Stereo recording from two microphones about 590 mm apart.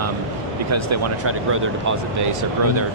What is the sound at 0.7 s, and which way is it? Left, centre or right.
Speech, right.